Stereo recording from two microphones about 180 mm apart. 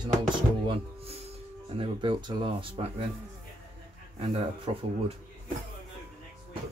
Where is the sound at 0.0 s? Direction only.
30° right (ahead or behind).